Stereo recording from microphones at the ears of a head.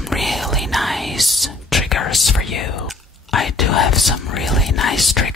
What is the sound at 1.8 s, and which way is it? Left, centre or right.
Whispering, left.